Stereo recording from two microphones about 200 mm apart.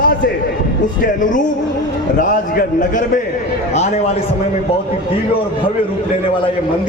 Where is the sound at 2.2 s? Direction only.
40° left (ahead or behind).